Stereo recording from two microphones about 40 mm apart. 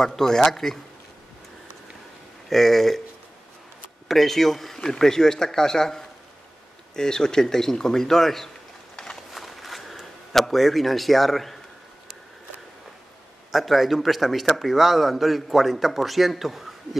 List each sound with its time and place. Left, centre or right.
0.0 s speech: centre
2.5 s a man's voice: centre
4.1 s a man's voice: centre
8.9 s a sound: centre
9.3 s a sound: centre
13.5 s a man's voice: centre